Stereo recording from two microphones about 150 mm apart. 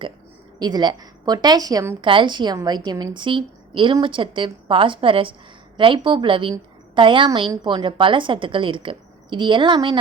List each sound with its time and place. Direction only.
0.6 s a woman's voice: 30° right (ahead or behind)
2.0 s a woman's voice: 35° right (ahead or behind)